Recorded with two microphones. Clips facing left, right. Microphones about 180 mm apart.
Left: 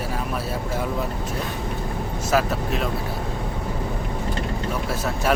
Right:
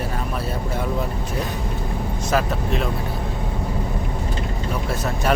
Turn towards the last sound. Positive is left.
turn(degrees=5)  # may be behind; listen again after turning